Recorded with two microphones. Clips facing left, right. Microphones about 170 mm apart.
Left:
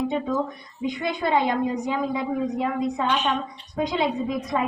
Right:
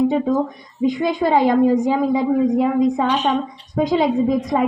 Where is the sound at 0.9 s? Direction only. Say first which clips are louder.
Right 4 dB; 45° right (ahead or behind).